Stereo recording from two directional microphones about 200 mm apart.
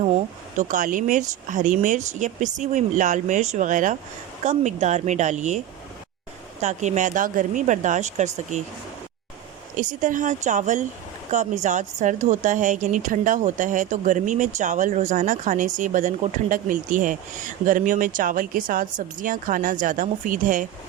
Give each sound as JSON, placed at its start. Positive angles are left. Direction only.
{"t": 0.0, "sound": "a woman's voice", "side_deg": -35}
{"t": 6.6, "sound": "a woman's voice", "side_deg": -35}
{"t": 9.7, "sound": "a woman's voice", "side_deg": -40}